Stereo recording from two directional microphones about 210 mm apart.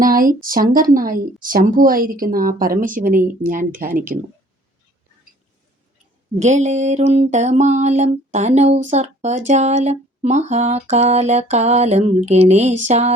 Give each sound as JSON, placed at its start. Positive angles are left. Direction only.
{"t": 0.0, "sound": "speech", "side_deg": -40}
{"t": 6.4, "sound": "speech", "side_deg": -35}